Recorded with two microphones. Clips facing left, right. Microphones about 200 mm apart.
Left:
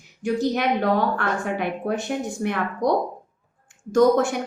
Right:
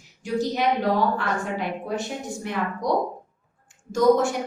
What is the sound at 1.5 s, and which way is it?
A woman's voice, 60° left (ahead or behind).